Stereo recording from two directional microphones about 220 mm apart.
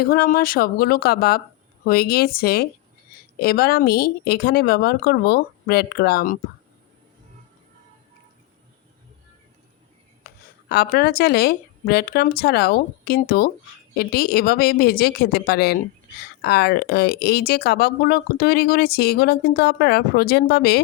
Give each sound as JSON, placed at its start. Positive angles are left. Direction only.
{"t": 0.0, "sound": "speech", "side_deg": 40}
{"t": 10.2, "sound": "speech", "side_deg": 45}